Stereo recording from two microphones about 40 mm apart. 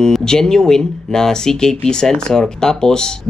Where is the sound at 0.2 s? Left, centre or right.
Centre.